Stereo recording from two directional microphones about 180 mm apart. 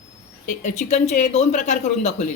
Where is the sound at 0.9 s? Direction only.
40° left (ahead or behind).